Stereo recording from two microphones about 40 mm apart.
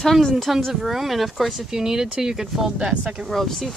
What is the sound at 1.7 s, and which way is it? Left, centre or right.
Speech, centre.